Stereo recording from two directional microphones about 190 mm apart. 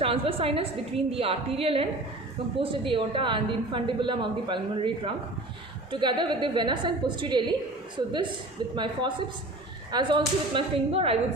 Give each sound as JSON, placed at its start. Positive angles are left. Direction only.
{"t": 0.0, "sound": "a woman's voice", "side_deg": -30}